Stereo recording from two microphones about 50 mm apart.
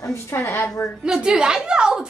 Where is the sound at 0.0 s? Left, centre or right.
Left.